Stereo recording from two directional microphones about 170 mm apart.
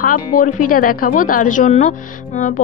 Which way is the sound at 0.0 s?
50° left (ahead or behind).